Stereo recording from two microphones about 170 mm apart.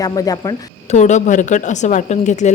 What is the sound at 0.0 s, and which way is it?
Speech, 20° left (ahead or behind).